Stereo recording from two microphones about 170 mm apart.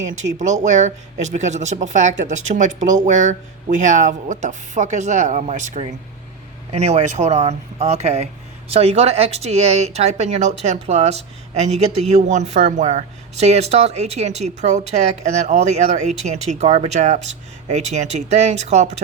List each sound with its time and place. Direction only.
0.2 s speech: 45° right (ahead or behind)